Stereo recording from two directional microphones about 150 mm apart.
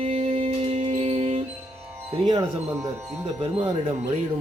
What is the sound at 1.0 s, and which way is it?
Music, 40° right (ahead or behind).